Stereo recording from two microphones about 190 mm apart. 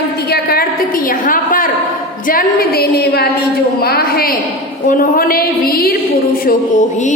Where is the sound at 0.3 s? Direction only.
50° left (ahead or behind).